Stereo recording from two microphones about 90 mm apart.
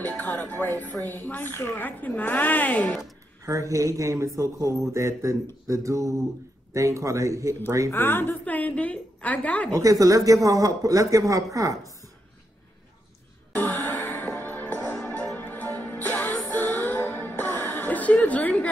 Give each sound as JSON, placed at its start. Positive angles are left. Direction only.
{"t": 0.0, "sound": "a woman's voice", "side_deg": 20}
{"t": 3.4, "sound": "speech", "side_deg": -35}
{"t": 7.9, "sound": "a woman's voice", "side_deg": 25}
{"t": 9.8, "sound": "speech", "side_deg": -40}
{"t": 13.6, "sound": "music", "side_deg": 20}